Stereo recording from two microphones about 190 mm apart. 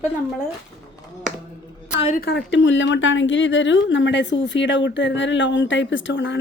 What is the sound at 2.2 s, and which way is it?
A woman's voice, 65° left (ahead or behind).